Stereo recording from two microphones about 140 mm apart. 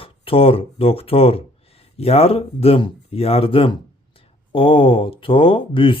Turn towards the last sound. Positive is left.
turn(degrees=40)  # may be behind; listen again after turning